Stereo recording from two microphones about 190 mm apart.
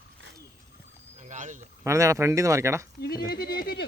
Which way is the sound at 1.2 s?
40° right (ahead or behind).